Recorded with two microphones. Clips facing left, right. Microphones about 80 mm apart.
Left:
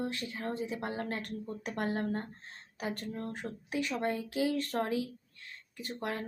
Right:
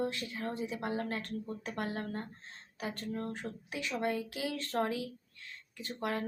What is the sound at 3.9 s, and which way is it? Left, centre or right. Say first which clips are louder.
Speech: left 1 dB; left.